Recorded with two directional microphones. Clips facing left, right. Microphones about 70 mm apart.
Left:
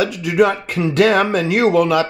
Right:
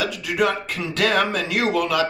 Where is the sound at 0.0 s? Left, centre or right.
Left.